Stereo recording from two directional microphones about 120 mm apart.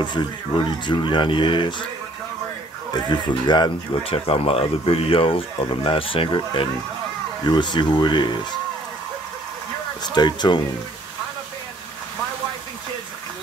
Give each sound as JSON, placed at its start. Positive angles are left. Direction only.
{"t": 0.0, "sound": "speech", "side_deg": 40}
{"t": 3.1, "sound": "speech", "side_deg": 35}
{"t": 4.1, "sound": "speech", "side_deg": 55}
{"t": 10.0, "sound": "speech", "side_deg": 35}